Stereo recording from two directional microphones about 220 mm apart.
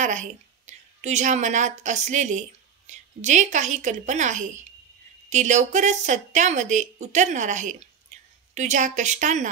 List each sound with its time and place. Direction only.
0.0 s a woman's voice: 35° right (ahead or behind)